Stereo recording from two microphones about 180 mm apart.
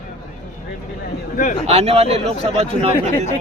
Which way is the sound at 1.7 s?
35° right (ahead or behind).